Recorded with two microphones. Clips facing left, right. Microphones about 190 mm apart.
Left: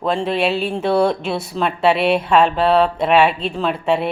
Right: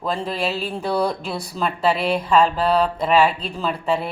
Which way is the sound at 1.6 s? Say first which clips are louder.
Left 4 dB; 70° left (ahead or behind).